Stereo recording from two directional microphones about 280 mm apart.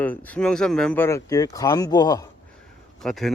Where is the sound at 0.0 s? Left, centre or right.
Centre.